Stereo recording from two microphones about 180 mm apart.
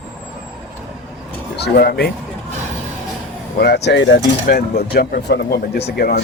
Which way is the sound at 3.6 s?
65° left (ahead or behind).